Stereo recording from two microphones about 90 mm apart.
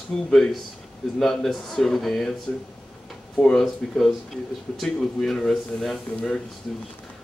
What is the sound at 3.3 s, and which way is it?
Speech, 10° left (ahead or behind).